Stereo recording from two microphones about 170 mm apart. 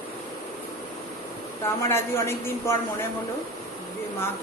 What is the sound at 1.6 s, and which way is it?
A woman's voice, 15° left (ahead or behind).